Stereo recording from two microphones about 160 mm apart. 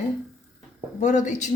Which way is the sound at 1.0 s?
50° left (ahead or behind).